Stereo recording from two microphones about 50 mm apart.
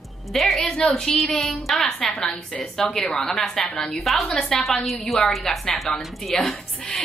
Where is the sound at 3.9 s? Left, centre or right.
Centre.